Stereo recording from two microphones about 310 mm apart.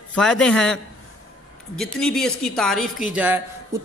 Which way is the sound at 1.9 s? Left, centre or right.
Centre.